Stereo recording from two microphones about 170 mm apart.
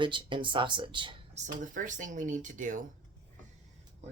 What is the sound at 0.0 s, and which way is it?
Speech, 30° right (ahead or behind).